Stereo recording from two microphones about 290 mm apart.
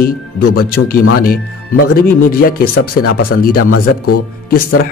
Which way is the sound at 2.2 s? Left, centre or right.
Left.